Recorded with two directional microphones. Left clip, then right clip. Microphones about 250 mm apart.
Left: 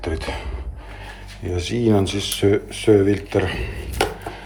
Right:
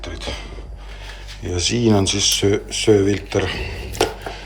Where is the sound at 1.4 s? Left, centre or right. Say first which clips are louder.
Right 2 dB; centre.